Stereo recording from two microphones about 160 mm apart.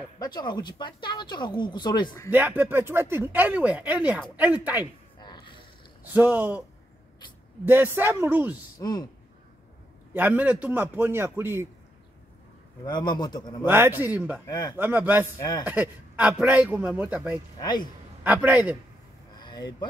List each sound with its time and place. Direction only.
0.2 s speech: 25° left (ahead or behind)
2.3 s speech: 10° right (ahead or behind)
5.2 s a sound: 30° left (ahead or behind)
6.1 s speech: 10° right (ahead or behind)
7.6 s speech: 15° right (ahead or behind)
8.7 s speech: 25° left (ahead or behind)
10.1 s speech: 10° right (ahead or behind)
12.8 s speech: 25° left (ahead or behind)
13.7 s speech: 15° right (ahead or behind)
14.5 s speech: 25° left (ahead or behind)
14.8 s speech: 10° right (ahead or behind)
17.6 s speech: 25° left (ahead or behind)
18.2 s speech: 10° right (ahead or behind)
19.3 s vehicle: 25° left (ahead or behind)